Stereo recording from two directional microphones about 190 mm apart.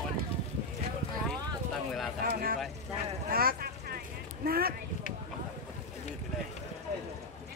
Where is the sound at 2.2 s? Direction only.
50° right (ahead or behind).